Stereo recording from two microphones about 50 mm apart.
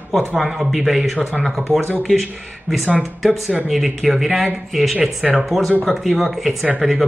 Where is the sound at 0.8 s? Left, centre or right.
Centre.